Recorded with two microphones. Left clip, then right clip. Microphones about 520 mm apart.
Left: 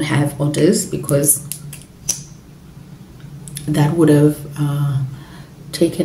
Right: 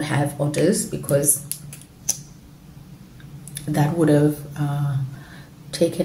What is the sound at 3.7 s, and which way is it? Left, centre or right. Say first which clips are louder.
Speech: left 5 dB; right.